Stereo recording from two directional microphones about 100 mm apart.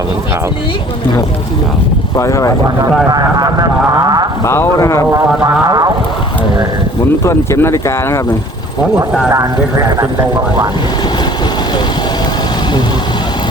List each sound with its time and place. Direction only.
2.1 s speech: 30° left (ahead or behind)
3.1 s speech: 40° right (ahead or behind)
4.4 s speech: 25° left (ahead or behind)
5.6 s vehicle: 40° right (ahead or behind)
7.3 s speech: 30° left (ahead or behind)
9.0 s speech: 10° right (ahead or behind)